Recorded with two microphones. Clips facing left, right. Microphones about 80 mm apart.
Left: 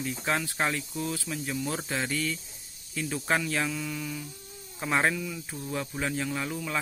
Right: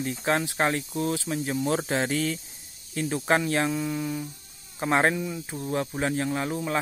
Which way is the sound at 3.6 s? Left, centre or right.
Right.